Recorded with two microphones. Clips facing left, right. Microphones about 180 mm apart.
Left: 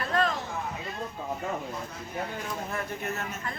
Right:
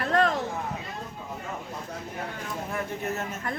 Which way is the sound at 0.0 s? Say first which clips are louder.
Right 3 dB; 70° right (ahead or behind).